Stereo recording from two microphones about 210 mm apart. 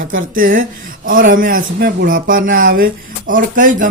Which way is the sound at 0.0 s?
65° right (ahead or behind).